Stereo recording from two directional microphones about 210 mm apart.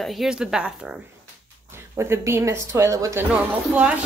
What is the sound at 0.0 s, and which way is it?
Speech, centre (ahead or behind).